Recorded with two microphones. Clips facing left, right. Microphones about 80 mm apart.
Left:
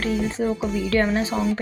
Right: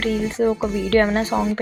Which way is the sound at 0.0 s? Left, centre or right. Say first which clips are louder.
Right 3 dB; right.